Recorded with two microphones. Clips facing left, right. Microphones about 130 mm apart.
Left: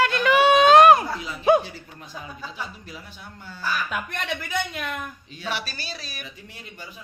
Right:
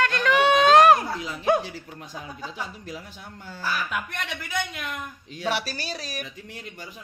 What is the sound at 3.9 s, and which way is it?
Speech, 30° left (ahead or behind).